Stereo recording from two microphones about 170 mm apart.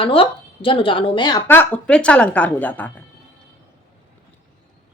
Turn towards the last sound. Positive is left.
turn(degrees=10)  # may be behind; listen again after turning